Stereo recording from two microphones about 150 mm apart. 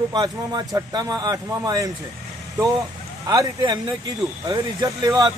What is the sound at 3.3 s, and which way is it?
Speech, 25° right (ahead or behind).